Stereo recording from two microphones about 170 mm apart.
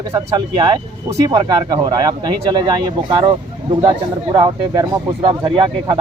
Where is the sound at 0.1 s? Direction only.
20° right (ahead or behind).